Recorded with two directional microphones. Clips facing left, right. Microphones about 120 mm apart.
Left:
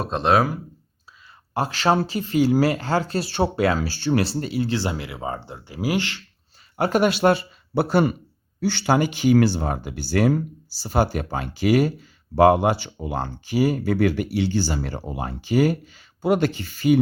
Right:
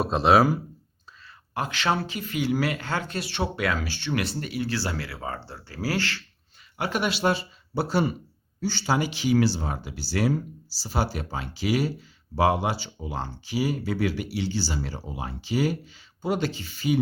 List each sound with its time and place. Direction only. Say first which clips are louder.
0.0 s speech: even; 5° right (ahead or behind)
1.5 s speech: left 6 dB; 35° left (ahead or behind); by 6.2 s 20° left (ahead or behind)
6.7 s speech: left 8 dB; 45° left (ahead or behind)